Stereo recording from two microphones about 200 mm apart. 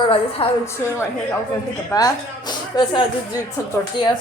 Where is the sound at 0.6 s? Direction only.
15° left (ahead or behind).